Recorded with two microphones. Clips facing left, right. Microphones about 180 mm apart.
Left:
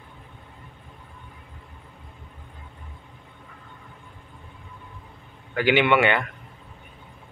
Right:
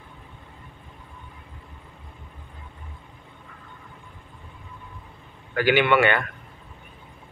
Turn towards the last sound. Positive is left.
turn(degrees=20)  # may be behind; listen again after turning